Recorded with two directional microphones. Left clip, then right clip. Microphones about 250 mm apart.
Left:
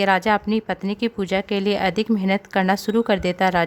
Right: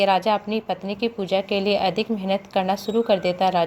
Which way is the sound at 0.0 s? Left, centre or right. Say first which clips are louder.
Left 1 dB; left.